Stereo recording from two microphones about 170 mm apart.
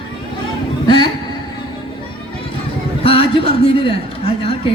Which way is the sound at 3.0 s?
30° left (ahead or behind).